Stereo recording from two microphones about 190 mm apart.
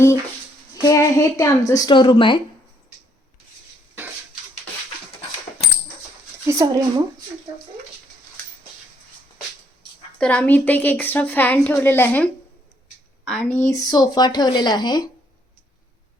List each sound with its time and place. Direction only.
0.8 s a woman's voice: 15° left (ahead or behind)
4.0 s dishes: 10° right (ahead or behind)
6.5 s speech: 20° right (ahead or behind)
10.2 s a woman's voice: 5° left (ahead or behind); by 15.1 s 20° left (ahead or behind)